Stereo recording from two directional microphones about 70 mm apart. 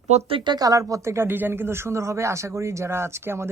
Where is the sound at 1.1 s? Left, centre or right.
Right.